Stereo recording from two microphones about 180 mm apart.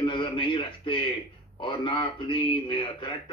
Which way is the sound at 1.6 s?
25° left (ahead or behind).